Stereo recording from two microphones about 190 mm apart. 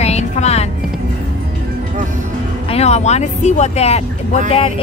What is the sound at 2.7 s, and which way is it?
Speech, 35° left (ahead or behind).